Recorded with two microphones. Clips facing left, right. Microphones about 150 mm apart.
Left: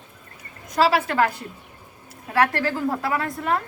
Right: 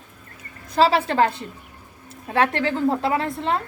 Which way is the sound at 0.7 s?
30° right (ahead or behind).